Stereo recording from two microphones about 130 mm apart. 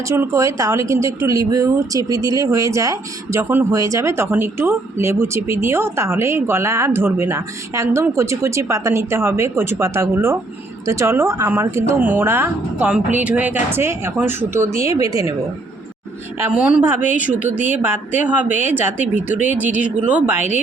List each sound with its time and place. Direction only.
0.0 s speech: 20° right (ahead or behind)
16.5 s speech: 5° right (ahead or behind)
18.4 s speech: 65° left (ahead or behind)
18.7 s speech: 15° right (ahead or behind)